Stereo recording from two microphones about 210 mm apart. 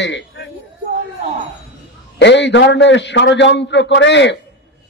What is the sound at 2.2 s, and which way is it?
A man's voice, 55° left (ahead or behind).